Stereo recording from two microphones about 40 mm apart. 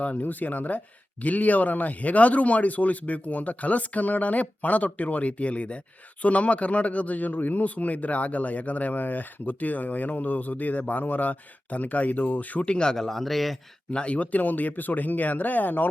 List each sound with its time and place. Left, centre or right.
0.0 s speech: left
12.6 s speech: left
13.0 s a man's voice: centre
13.9 s speech: left